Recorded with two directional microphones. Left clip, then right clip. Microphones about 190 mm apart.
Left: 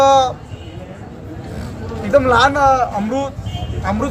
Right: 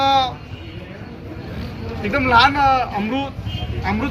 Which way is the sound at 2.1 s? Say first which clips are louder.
Left 2 dB; 15° left (ahead or behind).